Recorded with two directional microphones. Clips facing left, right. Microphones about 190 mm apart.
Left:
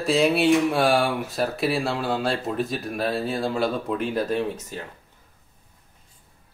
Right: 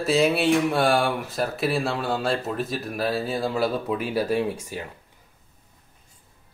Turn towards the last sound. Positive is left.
turn(degrees=-10)  # may be behind; listen again after turning